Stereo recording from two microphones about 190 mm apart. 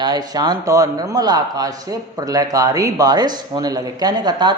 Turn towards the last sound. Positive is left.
turn(degrees=-20)  # may be behind; listen again after turning